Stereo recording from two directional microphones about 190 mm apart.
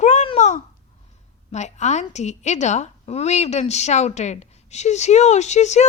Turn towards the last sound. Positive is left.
turn(degrees=35)  # may be behind; listen again after turning